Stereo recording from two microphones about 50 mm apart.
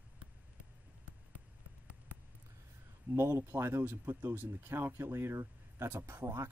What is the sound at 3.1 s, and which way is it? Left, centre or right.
Speech, right.